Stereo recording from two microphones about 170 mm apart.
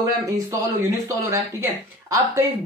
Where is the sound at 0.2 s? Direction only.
20° right (ahead or behind).